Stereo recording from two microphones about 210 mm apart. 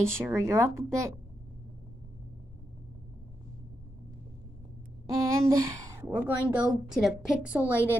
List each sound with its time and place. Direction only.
0.2 s speech: 10° right (ahead or behind)
5.1 s a woman's voice: 15° right (ahead or behind)